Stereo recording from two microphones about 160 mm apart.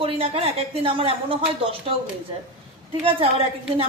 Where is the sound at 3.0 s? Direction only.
35° right (ahead or behind).